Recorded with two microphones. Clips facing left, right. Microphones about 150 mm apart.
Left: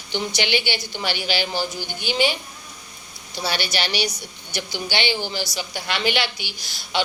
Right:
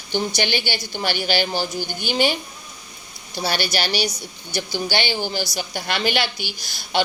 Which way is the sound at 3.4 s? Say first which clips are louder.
Right 2 dB; 40° right (ahead or behind).